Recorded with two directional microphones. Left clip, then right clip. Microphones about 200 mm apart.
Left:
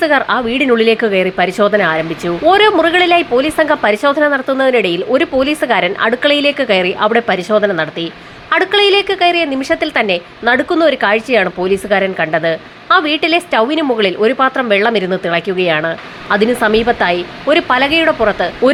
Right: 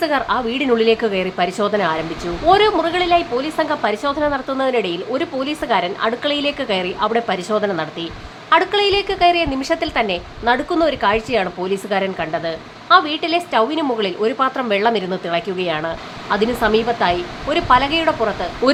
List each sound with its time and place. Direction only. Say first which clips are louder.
0.0 s a woman's voice: left 6 dB; 15° left (ahead or behind)